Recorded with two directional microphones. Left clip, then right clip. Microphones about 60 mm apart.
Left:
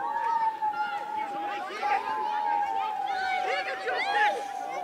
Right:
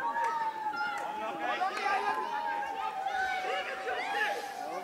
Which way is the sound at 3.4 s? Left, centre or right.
Left.